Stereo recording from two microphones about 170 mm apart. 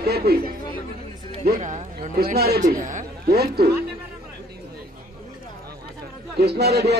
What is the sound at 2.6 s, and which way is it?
Speech, 45° right (ahead or behind).